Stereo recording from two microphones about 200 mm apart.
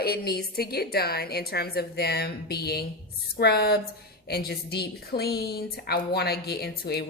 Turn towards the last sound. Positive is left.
turn(degrees=50)  # may be behind; listen again after turning